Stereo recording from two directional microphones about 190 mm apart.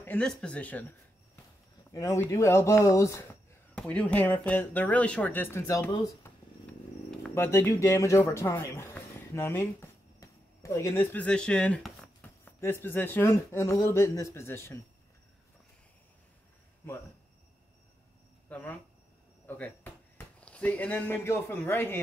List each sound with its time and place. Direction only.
0.0 s speech: 5° left (ahead or behind)
18.5 s speech: 10° left (ahead or behind)